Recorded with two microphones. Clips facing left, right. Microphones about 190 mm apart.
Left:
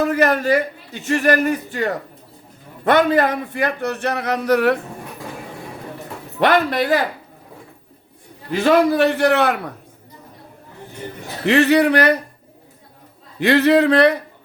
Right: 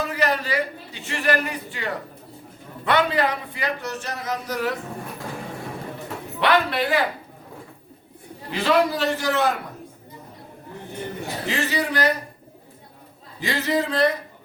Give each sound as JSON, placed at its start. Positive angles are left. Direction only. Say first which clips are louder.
{"t": 0.0, "sound": "a man's voice", "louder": "left 7 dB", "side_deg": 50}
{"t": 6.4, "sound": "a man's voice", "louder": "left 4 dB", "side_deg": 45}
{"t": 8.4, "sound": "a man's voice", "louder": "left 5 dB", "side_deg": 50}
{"t": 11.4, "sound": "a man's voice", "louder": "left 12 dB", "side_deg": 65}
{"t": 13.4, "sound": "speech", "louder": "left 10 dB", "side_deg": 65}